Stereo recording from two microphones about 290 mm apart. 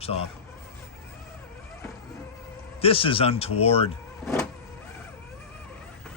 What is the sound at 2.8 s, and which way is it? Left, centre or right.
Speech, centre.